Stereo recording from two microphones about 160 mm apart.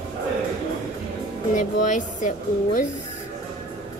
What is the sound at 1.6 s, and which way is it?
Speech, 50° left (ahead or behind).